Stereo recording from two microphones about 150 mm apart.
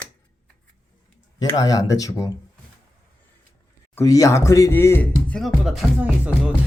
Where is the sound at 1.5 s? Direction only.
25° left (ahead or behind).